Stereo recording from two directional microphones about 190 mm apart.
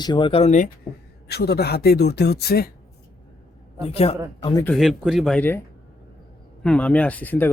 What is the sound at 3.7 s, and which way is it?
Speech, 30° left (ahead or behind).